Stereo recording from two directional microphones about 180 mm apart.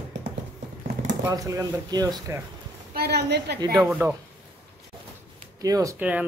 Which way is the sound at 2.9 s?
65° right (ahead or behind).